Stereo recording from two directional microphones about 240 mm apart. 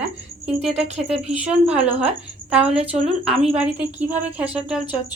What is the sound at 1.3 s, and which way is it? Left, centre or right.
A woman's voice, centre.